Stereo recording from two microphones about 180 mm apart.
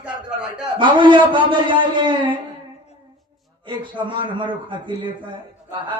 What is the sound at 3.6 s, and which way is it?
Speech, 25° right (ahead or behind).